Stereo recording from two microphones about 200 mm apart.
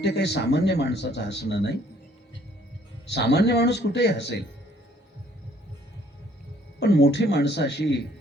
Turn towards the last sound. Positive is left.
turn(degrees=55)  # may be behind; listen again after turning